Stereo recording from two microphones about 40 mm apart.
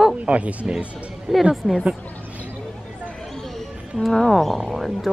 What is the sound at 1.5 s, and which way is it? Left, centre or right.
Speech, centre.